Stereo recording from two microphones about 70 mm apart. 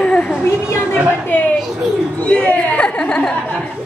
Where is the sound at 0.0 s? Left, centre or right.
Centre.